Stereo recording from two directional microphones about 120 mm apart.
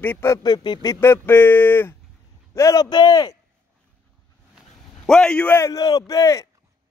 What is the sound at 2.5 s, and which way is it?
Speech, 30° left (ahead or behind).